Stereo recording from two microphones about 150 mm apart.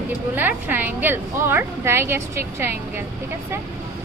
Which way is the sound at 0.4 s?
10° right (ahead or behind).